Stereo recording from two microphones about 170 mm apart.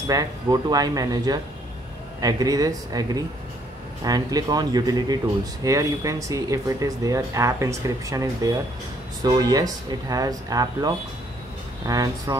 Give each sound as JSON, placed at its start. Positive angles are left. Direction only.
{"t": 0.1, "sound": "speech", "side_deg": -20}